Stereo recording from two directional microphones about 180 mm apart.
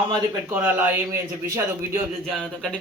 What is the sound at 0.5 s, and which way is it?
Speech, 10° right (ahead or behind).